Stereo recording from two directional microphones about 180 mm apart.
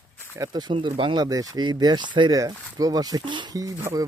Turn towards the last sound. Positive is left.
turn(degrees=-20)  # may be behind; listen again after turning